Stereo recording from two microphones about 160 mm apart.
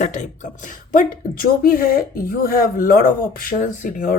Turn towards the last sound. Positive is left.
turn(degrees=55)  # may be behind; listen again after turning